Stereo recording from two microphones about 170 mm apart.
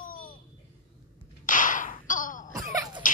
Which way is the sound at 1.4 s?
50° left (ahead or behind).